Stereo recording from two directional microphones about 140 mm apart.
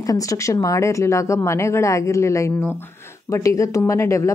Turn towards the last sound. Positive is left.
turn(degrees=20)  # may be behind; listen again after turning